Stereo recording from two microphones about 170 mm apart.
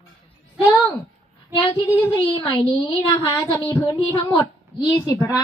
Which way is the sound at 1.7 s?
20° left (ahead or behind).